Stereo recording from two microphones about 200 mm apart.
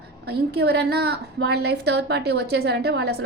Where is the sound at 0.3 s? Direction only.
55° right (ahead or behind).